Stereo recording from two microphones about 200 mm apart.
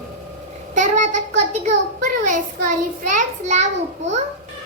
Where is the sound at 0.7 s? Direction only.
35° right (ahead or behind).